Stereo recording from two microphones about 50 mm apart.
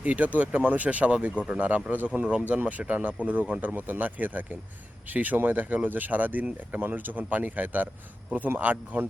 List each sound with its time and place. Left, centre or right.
0.0 s speech: right